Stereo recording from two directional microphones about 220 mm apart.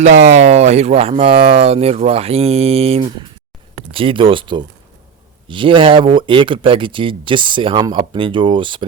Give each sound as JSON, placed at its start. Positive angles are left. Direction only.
{"t": 0.0, "sound": "speech", "side_deg": -30}